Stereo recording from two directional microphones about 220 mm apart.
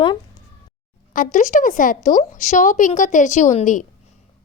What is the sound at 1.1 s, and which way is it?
A woman's voice, 35° left (ahead or behind).